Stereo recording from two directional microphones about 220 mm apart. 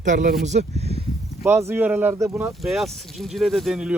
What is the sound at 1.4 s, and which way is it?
Speech, 10° right (ahead or behind).